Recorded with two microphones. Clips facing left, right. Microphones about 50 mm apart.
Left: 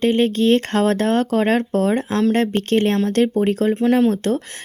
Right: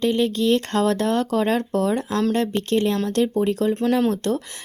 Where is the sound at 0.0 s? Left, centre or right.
Left.